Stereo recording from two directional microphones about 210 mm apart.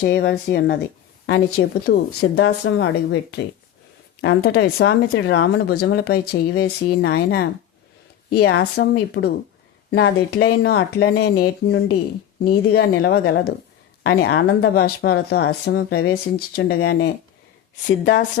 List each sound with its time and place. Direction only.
0.0 s speech: 55° left (ahead or behind)